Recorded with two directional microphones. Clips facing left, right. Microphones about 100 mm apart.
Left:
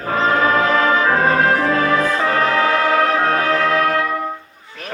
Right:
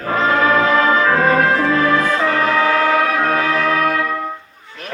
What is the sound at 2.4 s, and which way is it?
Music, 30° left (ahead or behind).